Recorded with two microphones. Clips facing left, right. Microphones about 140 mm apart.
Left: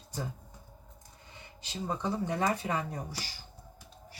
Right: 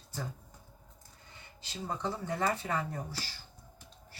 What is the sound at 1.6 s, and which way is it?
Speech, 15° left (ahead or behind).